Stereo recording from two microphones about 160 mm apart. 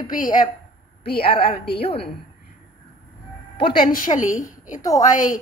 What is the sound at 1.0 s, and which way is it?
Speech, 80° left.